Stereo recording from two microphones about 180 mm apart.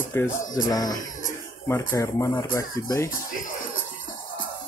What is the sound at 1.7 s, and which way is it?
Speech, 15° left (ahead or behind).